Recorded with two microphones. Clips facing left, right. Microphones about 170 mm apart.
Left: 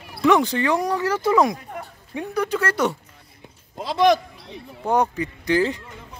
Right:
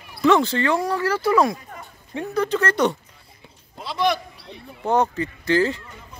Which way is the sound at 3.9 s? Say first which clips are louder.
Left 5 dB; 90° left.